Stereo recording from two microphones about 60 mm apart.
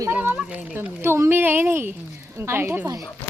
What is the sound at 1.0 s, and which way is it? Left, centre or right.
Speech, right.